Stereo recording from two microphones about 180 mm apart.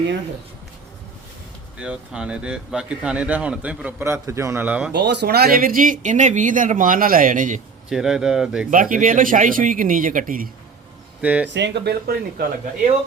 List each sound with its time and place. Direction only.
1.8 s speech: 5° right (ahead or behind)
4.9 s speech: 70° right (ahead or behind); by 7.6 s 45° right (ahead or behind)
7.9 s speech: centre (ahead or behind)
8.7 s speech: 50° right (ahead or behind)
11.2 s speech: 5° right (ahead or behind)
11.4 s speech: 75° right (ahead or behind); by 12.9 s 55° right (ahead or behind)